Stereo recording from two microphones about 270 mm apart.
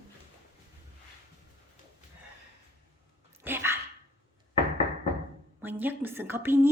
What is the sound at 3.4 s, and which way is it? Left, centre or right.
Dog, centre.